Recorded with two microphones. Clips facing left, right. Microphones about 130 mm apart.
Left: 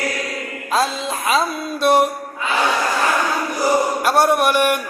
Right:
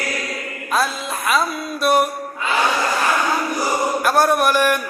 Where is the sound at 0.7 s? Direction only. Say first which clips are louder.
Left 2 dB; 30° left (ahead or behind).